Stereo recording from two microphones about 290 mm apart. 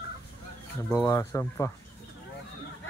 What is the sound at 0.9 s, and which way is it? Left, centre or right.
Speech, centre.